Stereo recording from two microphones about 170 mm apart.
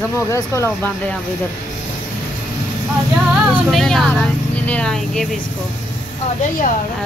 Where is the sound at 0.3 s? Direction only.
15° left (ahead or behind).